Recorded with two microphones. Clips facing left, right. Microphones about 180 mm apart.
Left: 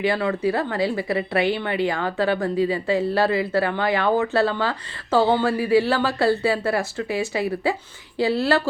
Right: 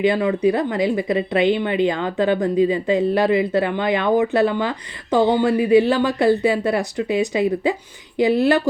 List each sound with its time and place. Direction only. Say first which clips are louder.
0.0 s a woman's voice: right 4 dB; 20° right (ahead or behind)